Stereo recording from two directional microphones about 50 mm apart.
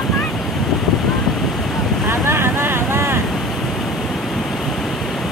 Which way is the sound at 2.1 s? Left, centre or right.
Right.